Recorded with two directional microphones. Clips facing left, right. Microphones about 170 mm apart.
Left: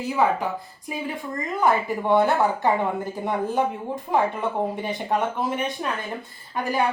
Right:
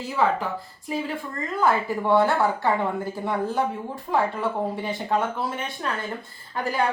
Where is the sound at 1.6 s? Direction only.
20° left (ahead or behind).